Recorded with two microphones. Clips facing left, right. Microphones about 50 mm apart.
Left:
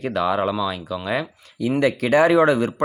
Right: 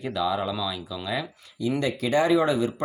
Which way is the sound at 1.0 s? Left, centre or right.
Left.